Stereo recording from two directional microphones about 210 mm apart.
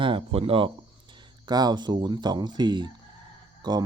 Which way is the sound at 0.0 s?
25° right (ahead or behind).